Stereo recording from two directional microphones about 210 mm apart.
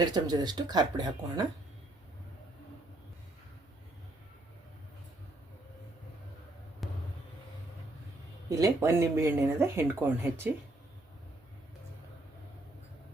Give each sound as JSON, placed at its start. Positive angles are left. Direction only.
{"t": 0.0, "sound": "speech", "side_deg": -20}
{"t": 6.8, "sound": "basketball bounce", "side_deg": 0}
{"t": 8.4, "sound": "speech", "side_deg": -15}